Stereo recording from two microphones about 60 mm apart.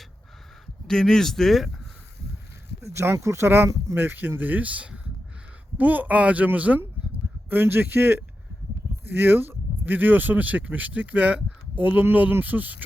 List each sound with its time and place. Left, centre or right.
0.9 s speech: centre
2.8 s speech: right